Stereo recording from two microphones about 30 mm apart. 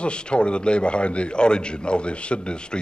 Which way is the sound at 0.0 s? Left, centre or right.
Left.